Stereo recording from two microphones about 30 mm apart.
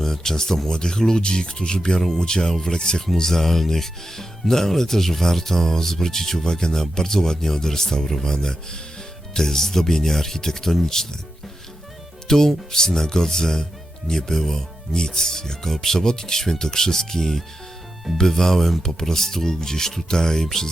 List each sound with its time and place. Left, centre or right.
0.0 s speech: centre
0.7 s speech: left
3.2 s speech: centre
12.3 s speech: centre
18.7 s speech: centre
18.9 s speech: centre